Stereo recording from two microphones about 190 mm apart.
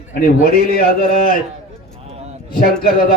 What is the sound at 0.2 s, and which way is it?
Speech, 50° left (ahead or behind).